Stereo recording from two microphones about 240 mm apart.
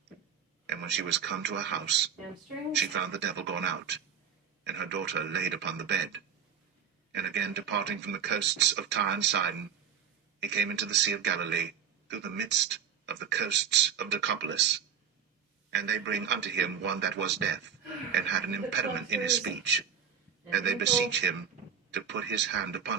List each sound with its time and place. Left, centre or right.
0.7 s speech: right
10.4 s speech: right